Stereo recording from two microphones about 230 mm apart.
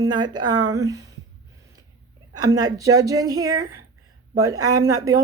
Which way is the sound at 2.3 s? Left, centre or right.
Centre.